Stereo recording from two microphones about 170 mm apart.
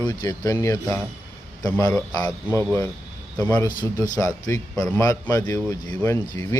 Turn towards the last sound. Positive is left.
turn(degrees=15)  # may be behind; listen again after turning